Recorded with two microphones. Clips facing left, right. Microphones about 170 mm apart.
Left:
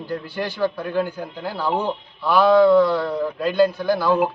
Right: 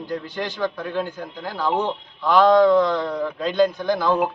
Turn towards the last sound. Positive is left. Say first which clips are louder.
# left 1 dB
turn(degrees=5)  # may be behind; listen again after turning